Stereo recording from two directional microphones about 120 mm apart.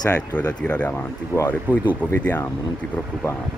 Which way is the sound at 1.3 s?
20° right (ahead or behind).